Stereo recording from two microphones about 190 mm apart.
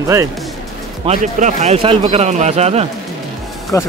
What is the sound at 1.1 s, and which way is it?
A man's voice, 40° right (ahead or behind).